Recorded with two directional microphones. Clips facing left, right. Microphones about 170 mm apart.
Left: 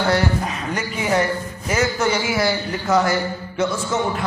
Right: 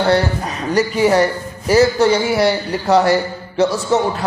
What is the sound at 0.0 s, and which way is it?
A man's voice, 35° right (ahead or behind).